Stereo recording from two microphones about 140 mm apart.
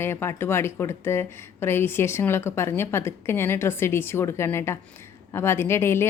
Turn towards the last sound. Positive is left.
turn(degrees=20)  # may be behind; listen again after turning